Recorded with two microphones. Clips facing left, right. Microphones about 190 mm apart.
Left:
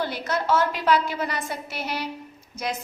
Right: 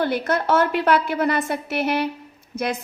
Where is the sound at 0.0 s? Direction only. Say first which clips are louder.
Right 5 dB; 55° right (ahead or behind).